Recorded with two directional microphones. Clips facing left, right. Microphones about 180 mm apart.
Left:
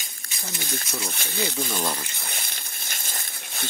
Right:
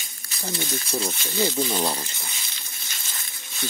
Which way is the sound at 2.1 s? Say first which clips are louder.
Left 3 dB; 60° left (ahead or behind).